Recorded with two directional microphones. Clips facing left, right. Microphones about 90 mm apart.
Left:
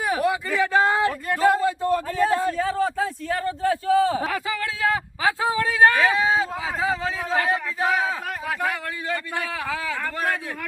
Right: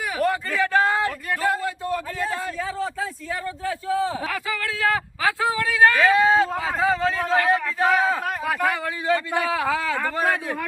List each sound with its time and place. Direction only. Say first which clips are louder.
0.2 s a sound: even; 10° left (ahead or behind); by 2.6 s 40° left (ahead or behind)
2.6 s a man's voice: left 4 dB; 60° left (ahead or behind)
4.3 s speech: left 1 dB; 25° left (ahead or behind)
6.0 s speech: right 3 dB; centre (ahead or behind)
9.6 s speech: right 4 dB; 15° right (ahead or behind)